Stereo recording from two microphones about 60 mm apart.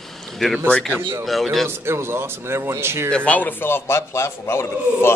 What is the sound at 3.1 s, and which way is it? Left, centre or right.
A man's voice, left.